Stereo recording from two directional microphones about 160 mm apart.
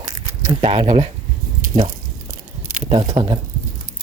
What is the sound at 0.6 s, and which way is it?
Speech, 30° right (ahead or behind).